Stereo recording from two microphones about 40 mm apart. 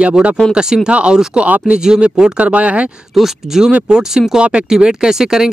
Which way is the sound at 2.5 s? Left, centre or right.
Right.